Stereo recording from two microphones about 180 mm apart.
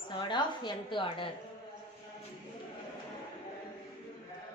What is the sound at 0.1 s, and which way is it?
A woman's voice, 25° left (ahead or behind).